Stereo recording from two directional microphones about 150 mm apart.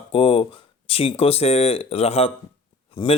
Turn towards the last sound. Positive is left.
turn(degrees=35)  # may be behind; listen again after turning